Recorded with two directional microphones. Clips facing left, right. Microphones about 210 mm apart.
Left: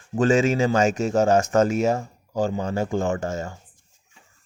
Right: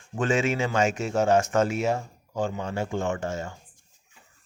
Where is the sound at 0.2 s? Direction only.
35° left (ahead or behind).